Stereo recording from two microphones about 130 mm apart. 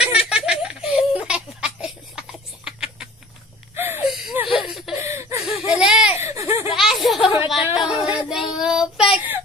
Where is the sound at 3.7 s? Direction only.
15° right (ahead or behind).